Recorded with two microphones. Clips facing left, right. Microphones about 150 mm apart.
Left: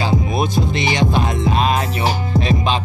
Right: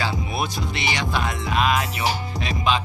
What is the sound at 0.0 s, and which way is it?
Music, 20° left (ahead or behind).